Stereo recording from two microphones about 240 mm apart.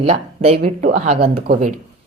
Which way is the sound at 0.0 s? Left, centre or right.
Right.